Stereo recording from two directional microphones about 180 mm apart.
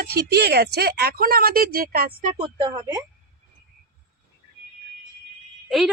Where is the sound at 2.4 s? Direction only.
25° right (ahead or behind).